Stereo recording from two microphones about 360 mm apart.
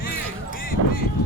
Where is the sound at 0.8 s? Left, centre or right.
Right.